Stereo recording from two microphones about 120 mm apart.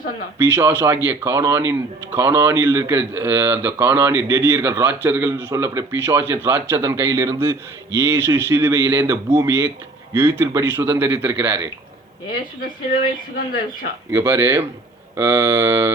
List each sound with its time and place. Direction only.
0.3 s a man's voice: 20° right (ahead or behind)
14.1 s speech: 20° right (ahead or behind)